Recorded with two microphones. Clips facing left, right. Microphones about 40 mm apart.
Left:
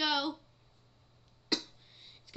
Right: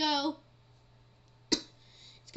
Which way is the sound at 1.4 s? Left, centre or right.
Centre.